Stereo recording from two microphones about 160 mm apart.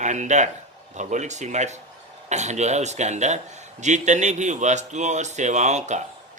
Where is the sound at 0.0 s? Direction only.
50° right (ahead or behind).